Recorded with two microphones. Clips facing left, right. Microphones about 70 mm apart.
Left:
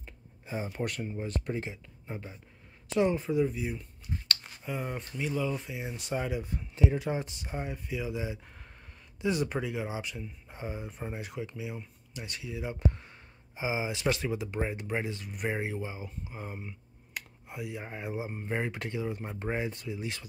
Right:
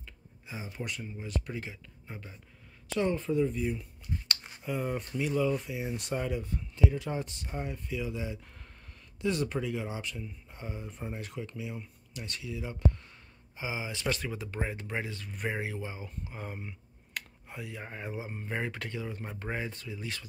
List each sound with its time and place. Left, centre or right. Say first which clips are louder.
0.0 s a sound: left 2 dB; left
1.0 s speech: left 3 dB; left; by 3.8 s centre
4.3 s a sound: left 4 dB; centre
4.6 s speech: right 3 dB; centre
16.3 s finger snapping: even; centre
18.4 s speech: left 1 dB; centre